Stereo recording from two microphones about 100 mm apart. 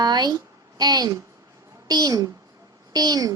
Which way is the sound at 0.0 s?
45° right (ahead or behind).